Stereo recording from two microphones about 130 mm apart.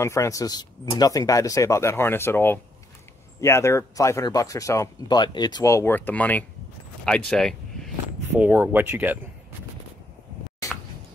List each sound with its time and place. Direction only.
0.0 s speech: 20° left (ahead or behind)
5.0 s speech: 35° left (ahead or behind)
5.7 s speech: 20° left (ahead or behind); by 7.9 s 5° left (ahead or behind)
8.3 s speech: 15° right (ahead or behind)